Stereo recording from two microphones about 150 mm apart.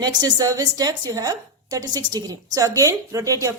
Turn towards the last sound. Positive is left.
turn(degrees=-20)  # may be behind; listen again after turning